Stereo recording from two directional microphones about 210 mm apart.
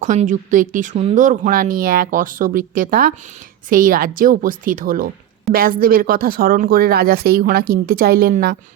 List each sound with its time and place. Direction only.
0.0 s speech: 35° right (ahead or behind)